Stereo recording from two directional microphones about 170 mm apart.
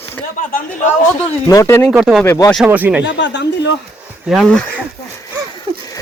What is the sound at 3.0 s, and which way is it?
Speech, 90° left.